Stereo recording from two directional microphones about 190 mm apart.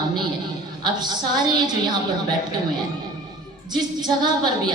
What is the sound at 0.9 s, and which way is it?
A woman's voice, 20° right (ahead or behind).